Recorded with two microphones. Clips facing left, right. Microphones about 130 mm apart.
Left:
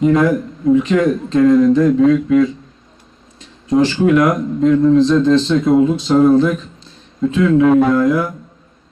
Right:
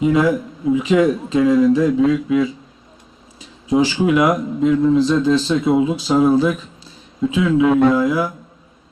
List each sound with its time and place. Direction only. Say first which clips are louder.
0.0 s speech: left 2 dB; 5° right (ahead or behind)